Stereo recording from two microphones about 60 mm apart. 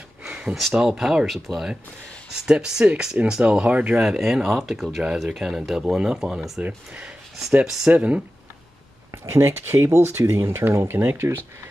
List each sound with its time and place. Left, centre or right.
0.2 s a sound: centre
0.7 s speech: centre
2.3 s speech: centre
3.9 s speech: centre
6.6 s speech: centre
7.6 s speech: centre
7.9 s speech: right
9.2 s speech: right